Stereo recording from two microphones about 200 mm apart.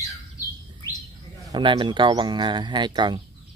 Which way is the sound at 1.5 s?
20° right (ahead or behind).